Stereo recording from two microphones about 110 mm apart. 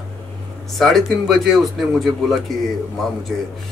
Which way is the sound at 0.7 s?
5° left (ahead or behind).